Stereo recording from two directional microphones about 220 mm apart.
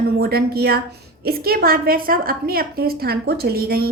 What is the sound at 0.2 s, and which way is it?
A woman's voice, 45° right (ahead or behind).